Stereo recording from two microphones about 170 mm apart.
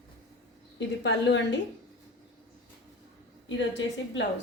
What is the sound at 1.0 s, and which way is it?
Speech, 90° left.